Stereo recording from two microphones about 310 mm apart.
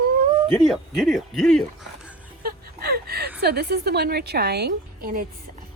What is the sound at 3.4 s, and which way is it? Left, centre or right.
A woman's voice, right.